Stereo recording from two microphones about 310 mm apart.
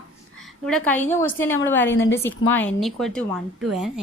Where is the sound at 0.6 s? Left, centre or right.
Centre.